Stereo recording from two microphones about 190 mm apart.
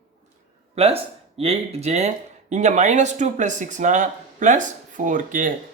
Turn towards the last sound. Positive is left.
turn(degrees=-45)  # may be behind; listen again after turning